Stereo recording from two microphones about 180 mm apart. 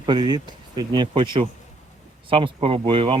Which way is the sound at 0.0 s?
25° right (ahead or behind).